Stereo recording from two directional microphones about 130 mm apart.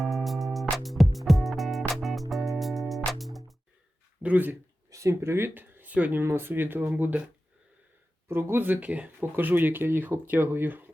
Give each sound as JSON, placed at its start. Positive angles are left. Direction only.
{"t": 0.0, "sound": "music", "side_deg": 0}
{"t": 4.2, "sound": "a sound", "side_deg": -10}
{"t": 4.9, "sound": "speech", "side_deg": -25}
{"t": 8.3, "sound": "speech", "side_deg": -20}